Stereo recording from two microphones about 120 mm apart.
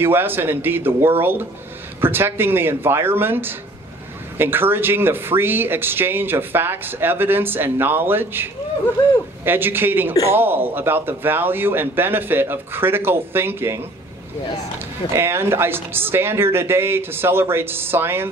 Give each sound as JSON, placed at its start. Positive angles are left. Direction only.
{"t": 0.0, "sound": "speech", "side_deg": -20}
{"t": 15.1, "sound": "speech", "side_deg": -20}